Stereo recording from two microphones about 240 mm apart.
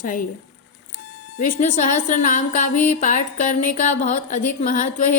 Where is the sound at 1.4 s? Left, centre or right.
Left.